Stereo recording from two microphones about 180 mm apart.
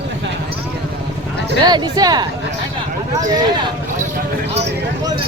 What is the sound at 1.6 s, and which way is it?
Speech, 25° right (ahead or behind).